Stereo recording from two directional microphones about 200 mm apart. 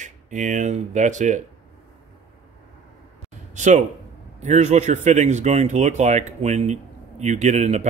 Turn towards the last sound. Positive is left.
turn(degrees=-35)  # may be behind; listen again after turning